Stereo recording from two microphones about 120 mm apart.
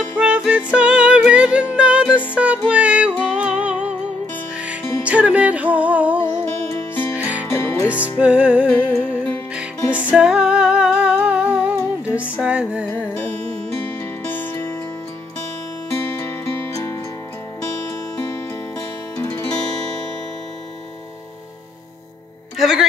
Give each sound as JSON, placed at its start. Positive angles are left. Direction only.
{"t": 0.2, "sound": "music", "side_deg": -10}
{"t": 5.0, "sound": "music", "side_deg": -10}
{"t": 6.2, "sound": "music", "side_deg": 20}
{"t": 7.2, "sound": "music", "side_deg": -10}
{"t": 7.4, "sound": "music", "side_deg": 20}
{"t": 8.2, "sound": "music", "side_deg": -10}
{"t": 13.7, "sound": "music", "side_deg": 15}
{"t": 15.9, "sound": "music", "side_deg": 20}
{"t": 19.1, "sound": "music", "side_deg": 20}
{"t": 22.6, "sound": "music", "side_deg": -5}